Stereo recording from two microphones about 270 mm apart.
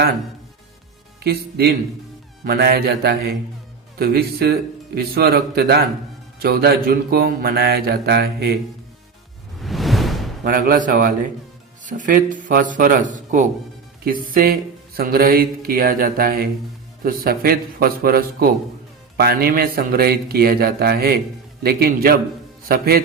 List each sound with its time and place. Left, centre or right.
1.2 s speech: right
9.6 s whoosh: centre
10.4 s a man's voice: right